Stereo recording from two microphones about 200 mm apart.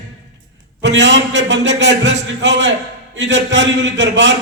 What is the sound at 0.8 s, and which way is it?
A man's voice, 60° right (ahead or behind).